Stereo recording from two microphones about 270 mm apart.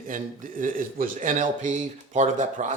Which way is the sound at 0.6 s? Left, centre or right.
Right.